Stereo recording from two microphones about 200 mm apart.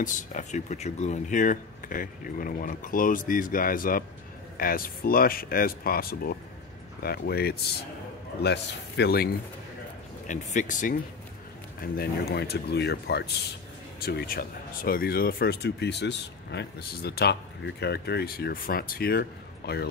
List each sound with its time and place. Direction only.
0.0 s speech: 40° left (ahead or behind)
10.2 s speech: 40° left (ahead or behind)
11.8 s speech: 50° left (ahead or behind)